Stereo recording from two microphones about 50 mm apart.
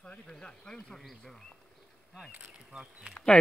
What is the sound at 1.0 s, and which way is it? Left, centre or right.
Speech, centre.